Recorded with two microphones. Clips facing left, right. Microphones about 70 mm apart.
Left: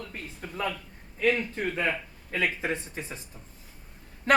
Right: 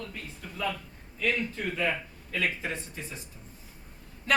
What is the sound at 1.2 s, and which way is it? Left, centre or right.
Speech, left.